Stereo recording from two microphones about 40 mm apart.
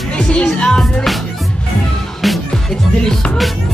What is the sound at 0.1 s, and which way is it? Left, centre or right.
Music, left.